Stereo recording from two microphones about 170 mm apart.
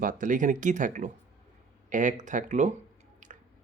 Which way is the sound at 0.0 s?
50° right (ahead or behind).